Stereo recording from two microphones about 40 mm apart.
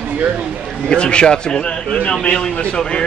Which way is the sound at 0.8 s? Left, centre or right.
Left.